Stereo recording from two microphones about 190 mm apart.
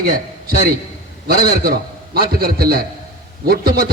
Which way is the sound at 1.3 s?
50° right (ahead or behind).